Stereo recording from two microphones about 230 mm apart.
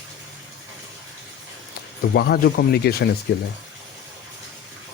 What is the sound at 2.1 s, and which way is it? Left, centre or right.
Speech, left.